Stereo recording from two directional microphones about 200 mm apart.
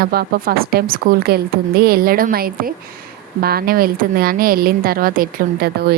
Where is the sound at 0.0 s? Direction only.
50° right (ahead or behind).